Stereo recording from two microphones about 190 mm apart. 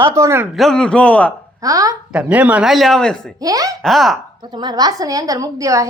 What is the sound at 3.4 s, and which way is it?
Speech, 20° right (ahead or behind).